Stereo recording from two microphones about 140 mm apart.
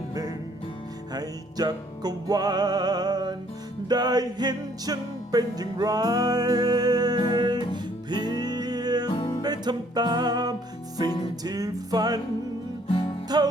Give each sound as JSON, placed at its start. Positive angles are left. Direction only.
{"t": 0.1, "sound": "music", "side_deg": -25}
{"t": 9.0, "sound": "music", "side_deg": 35}
{"t": 9.4, "sound": "music", "side_deg": -30}
{"t": 12.9, "sound": "music", "side_deg": 40}
{"t": 13.2, "sound": "music", "side_deg": -30}